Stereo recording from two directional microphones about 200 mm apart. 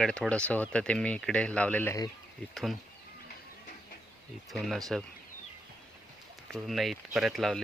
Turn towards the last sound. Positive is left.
turn(degrees=0)  # may be behind; listen again after turning